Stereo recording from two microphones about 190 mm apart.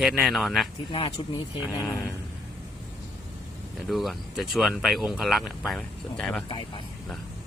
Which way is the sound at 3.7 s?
Centre (ahead or behind).